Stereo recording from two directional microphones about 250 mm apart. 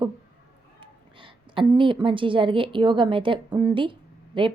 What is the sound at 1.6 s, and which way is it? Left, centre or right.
A woman's voice, centre.